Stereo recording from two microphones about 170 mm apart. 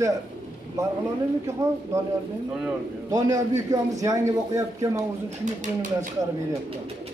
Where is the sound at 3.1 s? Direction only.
20° right (ahead or behind).